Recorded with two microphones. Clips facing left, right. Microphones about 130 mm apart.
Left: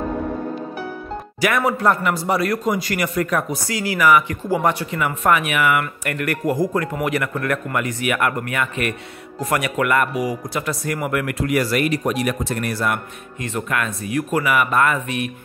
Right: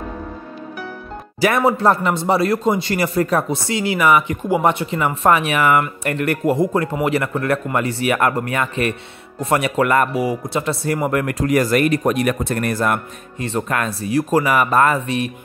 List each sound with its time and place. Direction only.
1.4 s a man's voice: 30° right (ahead or behind)
6.1 s a man's voice: 25° right (ahead or behind); by 13.0 s 45° right (ahead or behind)
13.4 s speech: 35° right (ahead or behind)